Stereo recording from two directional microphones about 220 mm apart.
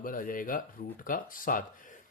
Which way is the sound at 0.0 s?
40° left (ahead or behind).